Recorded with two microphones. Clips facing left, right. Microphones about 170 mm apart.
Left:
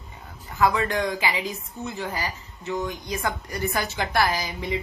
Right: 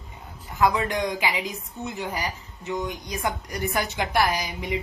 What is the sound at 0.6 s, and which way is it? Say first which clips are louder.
A woman's voice: even; 15° right (ahead or behind).